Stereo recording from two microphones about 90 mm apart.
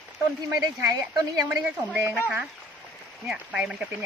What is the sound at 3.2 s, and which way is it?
Speech, 10° right (ahead or behind).